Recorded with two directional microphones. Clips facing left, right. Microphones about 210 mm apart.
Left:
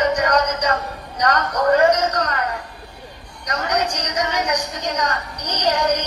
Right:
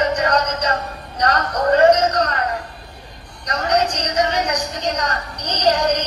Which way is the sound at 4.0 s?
35° right (ahead or behind).